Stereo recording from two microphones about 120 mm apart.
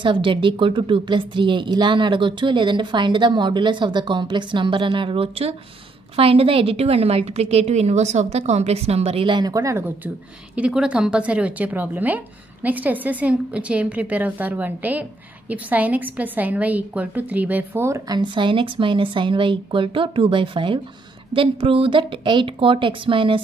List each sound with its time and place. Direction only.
0.0 s a woman's voice: 45° right (ahead or behind)